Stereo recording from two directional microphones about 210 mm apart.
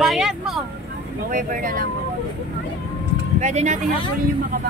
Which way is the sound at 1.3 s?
40° right (ahead or behind).